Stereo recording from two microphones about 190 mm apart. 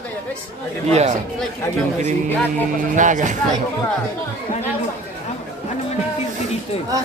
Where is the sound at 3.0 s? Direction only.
40° right (ahead or behind).